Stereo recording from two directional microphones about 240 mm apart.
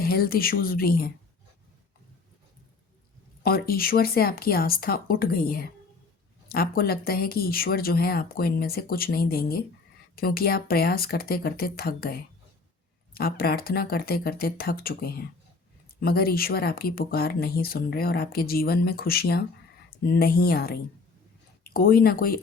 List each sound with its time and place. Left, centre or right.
0.0 s speech: left
3.4 s speech: left